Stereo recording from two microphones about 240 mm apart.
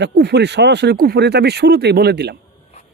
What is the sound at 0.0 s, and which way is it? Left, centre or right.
Speech, right.